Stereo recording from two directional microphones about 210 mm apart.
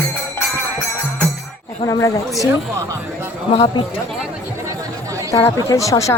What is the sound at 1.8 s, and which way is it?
Speech, 15° left (ahead or behind).